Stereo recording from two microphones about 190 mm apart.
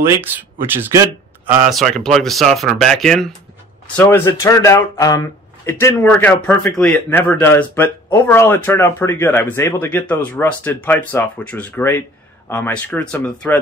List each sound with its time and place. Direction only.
0.0 s speech: 10° right (ahead or behind)
1.7 s speech: centre (ahead or behind)